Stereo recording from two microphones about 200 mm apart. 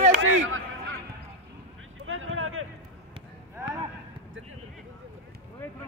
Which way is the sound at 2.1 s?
90° right.